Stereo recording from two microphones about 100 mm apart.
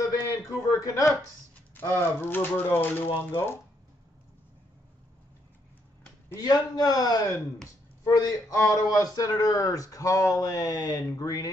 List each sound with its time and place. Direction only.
0.6 s a man's voice: 35° left (ahead or behind)
2.0 s speech: 20° left (ahead or behind)
6.2 s speech: 35° left (ahead or behind)